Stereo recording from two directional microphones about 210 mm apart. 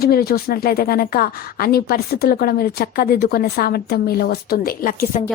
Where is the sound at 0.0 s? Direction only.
45° left (ahead or behind).